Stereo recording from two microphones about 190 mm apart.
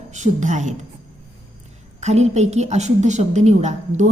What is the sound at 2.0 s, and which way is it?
A woman's voice, 35° right (ahead or behind).